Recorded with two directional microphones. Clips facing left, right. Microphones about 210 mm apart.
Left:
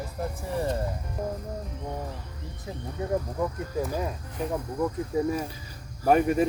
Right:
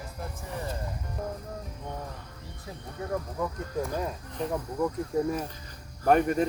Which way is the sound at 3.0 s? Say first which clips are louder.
Left 4 dB; 20° left (ahead or behind).